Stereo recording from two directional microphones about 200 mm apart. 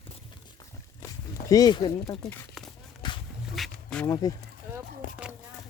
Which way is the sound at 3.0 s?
25° left (ahead or behind).